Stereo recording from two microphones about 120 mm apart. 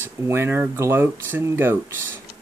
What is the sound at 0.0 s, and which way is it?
Speech, 20° right (ahead or behind).